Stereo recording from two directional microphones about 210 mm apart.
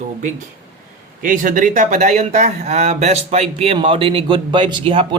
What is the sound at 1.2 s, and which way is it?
Speech, 40° right (ahead or behind).